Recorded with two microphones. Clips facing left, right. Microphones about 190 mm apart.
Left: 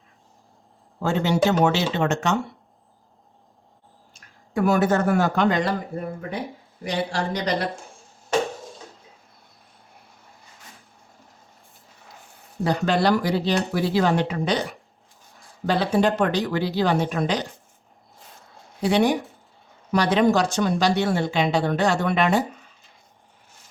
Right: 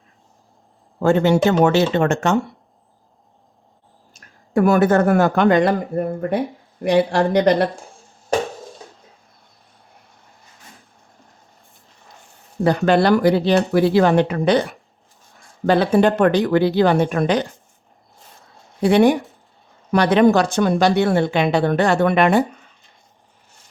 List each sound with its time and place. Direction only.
0.9 s speech: 55° right (ahead or behind)
4.1 s speech: 55° right (ahead or behind)
12.6 s speech: 60° right (ahead or behind)
18.8 s speech: 55° right (ahead or behind)